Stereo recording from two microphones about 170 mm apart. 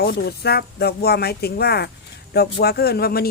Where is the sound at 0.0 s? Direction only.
65° left (ahead or behind).